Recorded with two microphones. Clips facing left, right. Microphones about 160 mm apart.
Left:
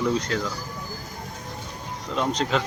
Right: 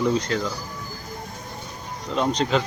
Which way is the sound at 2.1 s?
Centre (ahead or behind).